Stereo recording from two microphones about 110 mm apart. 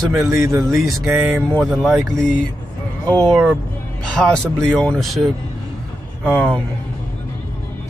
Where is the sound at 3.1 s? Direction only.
5° left (ahead or behind).